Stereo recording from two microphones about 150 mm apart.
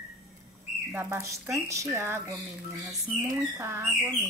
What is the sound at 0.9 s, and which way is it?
Speech, 20° right (ahead or behind).